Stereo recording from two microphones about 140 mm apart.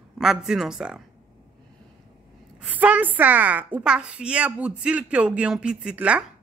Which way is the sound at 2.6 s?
10° right (ahead or behind).